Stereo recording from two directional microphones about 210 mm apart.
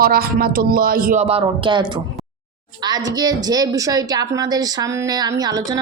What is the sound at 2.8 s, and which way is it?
A woman's voice, 20° right (ahead or behind).